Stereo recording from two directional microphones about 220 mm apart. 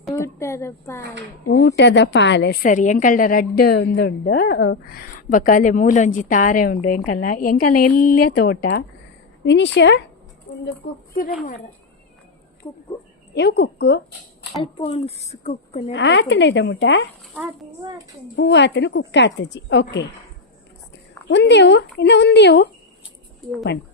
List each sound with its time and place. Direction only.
0.1 s speech: 15° left (ahead or behind)
1.5 s a woman's voice: 55° left (ahead or behind)
12.6 s speech: 10° left (ahead or behind)
13.3 s speech: 50° left (ahead or behind)
14.5 s speech: 25° left (ahead or behind)
15.9 s speech: 55° left (ahead or behind)
18.3 s speech: 55° left (ahead or behind)
21.2 s speech: 50° left (ahead or behind)